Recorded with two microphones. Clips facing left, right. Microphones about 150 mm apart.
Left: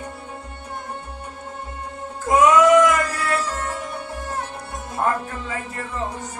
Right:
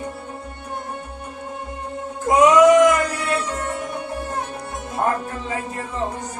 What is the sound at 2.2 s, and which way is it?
Music, 20° right (ahead or behind).